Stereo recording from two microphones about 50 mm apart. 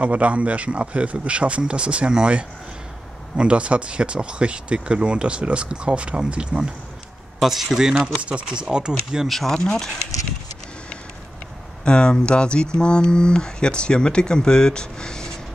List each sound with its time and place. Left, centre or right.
0.0 s speech: right
7.3 s speech: centre
8.2 s speech: right
8.6 s speech: centre
9.3 s speech: centre
11.8 s speech: centre